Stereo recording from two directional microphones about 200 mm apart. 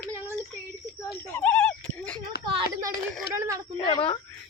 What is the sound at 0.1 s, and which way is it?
Child singing, 10° right (ahead or behind).